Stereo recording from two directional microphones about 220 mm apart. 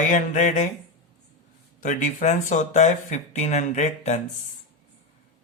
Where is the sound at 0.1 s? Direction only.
35° left (ahead or behind).